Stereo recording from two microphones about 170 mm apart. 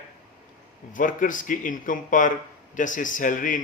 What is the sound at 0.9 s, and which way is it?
Speech, 50° left (ahead or behind).